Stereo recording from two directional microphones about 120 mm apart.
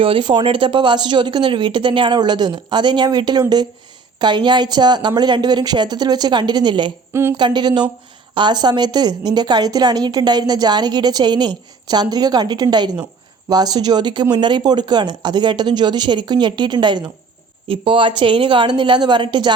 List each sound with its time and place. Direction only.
0.0 s a woman's voice: 45° right (ahead or behind)
7.1 s a woman's voice: 20° right (ahead or behind)
7.3 s a woman's voice: 40° right (ahead or behind)